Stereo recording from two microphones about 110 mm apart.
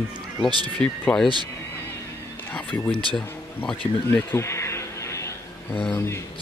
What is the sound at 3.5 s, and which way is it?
Speech, 15° left (ahead or behind).